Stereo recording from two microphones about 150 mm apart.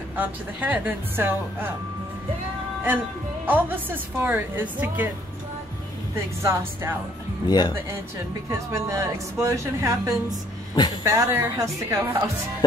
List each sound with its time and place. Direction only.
0.1 s a woman's voice: 10° right (ahead or behind)
3.4 s a woman's voice: 10° right (ahead or behind)
6.4 s a woman's voice: 15° right (ahead or behind)
7.4 s speech: 25° left (ahead or behind)
8.5 s speech: 20° right (ahead or behind)